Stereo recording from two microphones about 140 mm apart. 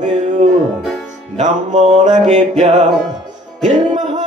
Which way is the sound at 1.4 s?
60° right (ahead or behind).